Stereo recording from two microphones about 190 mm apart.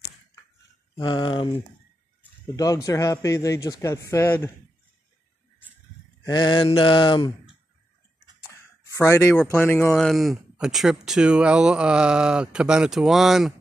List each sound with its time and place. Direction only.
0.9 s mantra: 25° left (ahead or behind)
2.4 s a man's voice: 20° left (ahead or behind)
6.2 s mantra: 25° left (ahead or behind)
8.9 s a man's voice: 15° left (ahead or behind)
9.9 s speech: centre (ahead or behind)